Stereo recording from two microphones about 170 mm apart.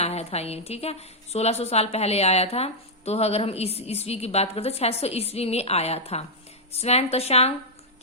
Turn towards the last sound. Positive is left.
turn(degrees=40)  # may be behind; listen again after turning